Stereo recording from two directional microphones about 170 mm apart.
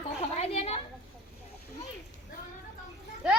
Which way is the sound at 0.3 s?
40° left (ahead or behind).